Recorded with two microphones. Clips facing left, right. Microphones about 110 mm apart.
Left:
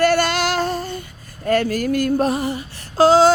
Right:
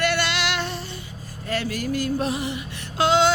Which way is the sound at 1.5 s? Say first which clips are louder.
Left 8 dB; 50° left (ahead or behind).